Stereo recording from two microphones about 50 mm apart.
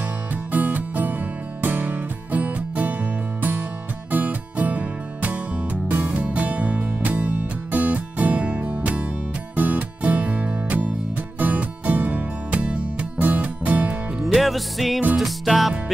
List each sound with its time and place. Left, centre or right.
0.3 s music: right
14.2 s music: centre